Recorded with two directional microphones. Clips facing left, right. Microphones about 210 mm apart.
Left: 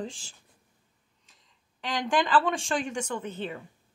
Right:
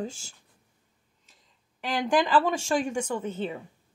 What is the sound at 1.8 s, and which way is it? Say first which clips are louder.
Speech: right 3 dB; 10° right (ahead or behind).